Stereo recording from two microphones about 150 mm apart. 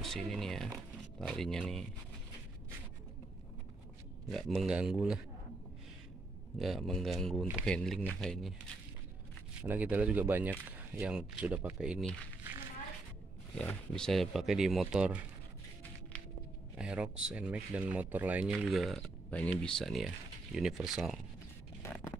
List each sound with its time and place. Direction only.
0.0 s speech: centre (ahead or behind)
4.3 s speech: centre (ahead or behind)
6.6 s speech: centre (ahead or behind)
9.6 s speech: 10° right (ahead or behind)
13.6 s speech: 5° left (ahead or behind)
16.7 s speech: 5° right (ahead or behind)
21.8 s a sound: 15° left (ahead or behind)